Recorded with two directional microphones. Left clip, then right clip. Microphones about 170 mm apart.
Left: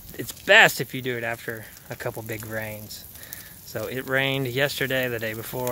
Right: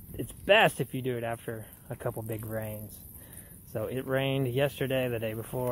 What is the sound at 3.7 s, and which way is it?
Speech, 15° left (ahead or behind).